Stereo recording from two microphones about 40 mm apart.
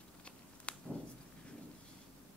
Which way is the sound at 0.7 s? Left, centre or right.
Left.